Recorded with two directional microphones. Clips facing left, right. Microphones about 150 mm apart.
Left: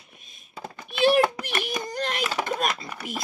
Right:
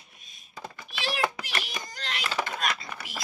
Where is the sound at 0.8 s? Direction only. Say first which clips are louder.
Left 11 dB; 55° left (ahead or behind).